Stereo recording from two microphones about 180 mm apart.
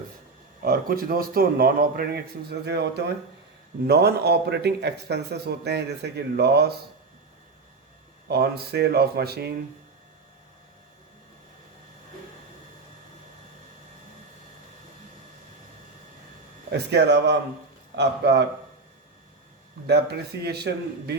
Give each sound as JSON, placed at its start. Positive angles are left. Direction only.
{"t": 0.6, "sound": "a man's voice", "side_deg": -55}
{"t": 8.3, "sound": "a man's voice", "side_deg": -65}
{"t": 16.7, "sound": "speech", "side_deg": -70}
{"t": 19.9, "sound": "a man's voice", "side_deg": -65}